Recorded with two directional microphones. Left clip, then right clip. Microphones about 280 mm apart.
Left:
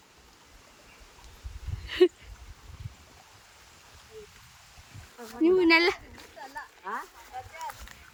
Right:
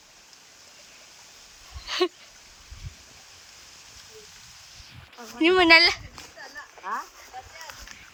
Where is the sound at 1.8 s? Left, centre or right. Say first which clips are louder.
Left 3 dB; centre.